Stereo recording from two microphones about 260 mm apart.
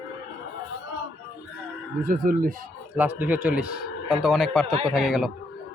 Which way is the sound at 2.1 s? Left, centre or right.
Right.